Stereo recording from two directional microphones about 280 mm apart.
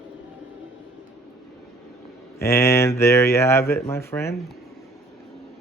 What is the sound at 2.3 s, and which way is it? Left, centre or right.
Speech, centre.